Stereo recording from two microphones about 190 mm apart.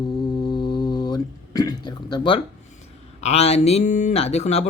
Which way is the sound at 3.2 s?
35° left (ahead or behind).